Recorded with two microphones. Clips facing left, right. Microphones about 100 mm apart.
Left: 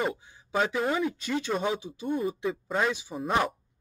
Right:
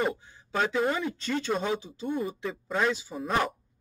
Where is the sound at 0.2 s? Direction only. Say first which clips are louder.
Left 1 dB; 15° left (ahead or behind).